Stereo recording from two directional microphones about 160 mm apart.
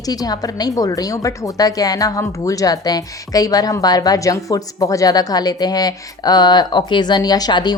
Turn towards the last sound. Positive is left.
turn(degrees=25)  # may be behind; listen again after turning